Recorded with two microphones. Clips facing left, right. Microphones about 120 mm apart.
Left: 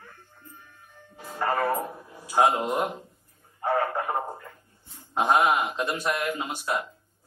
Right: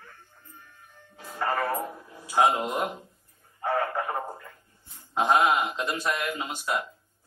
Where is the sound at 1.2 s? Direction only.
15° left (ahead or behind).